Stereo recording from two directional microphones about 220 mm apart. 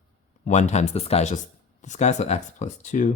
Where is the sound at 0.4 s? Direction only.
30° left (ahead or behind).